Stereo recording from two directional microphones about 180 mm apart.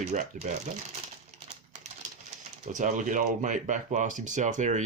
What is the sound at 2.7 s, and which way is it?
Speech, 45° right (ahead or behind).